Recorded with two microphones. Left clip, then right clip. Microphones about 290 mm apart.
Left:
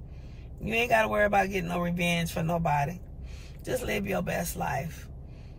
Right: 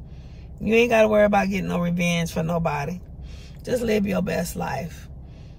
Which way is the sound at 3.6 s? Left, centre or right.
Centre.